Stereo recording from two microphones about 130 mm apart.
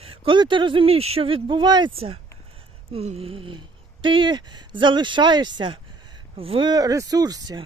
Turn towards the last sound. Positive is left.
turn(degrees=-30)  # may be behind; listen again after turning